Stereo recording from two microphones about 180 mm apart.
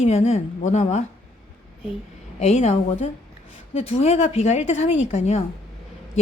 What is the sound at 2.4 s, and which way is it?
Speech, 40° left (ahead or behind).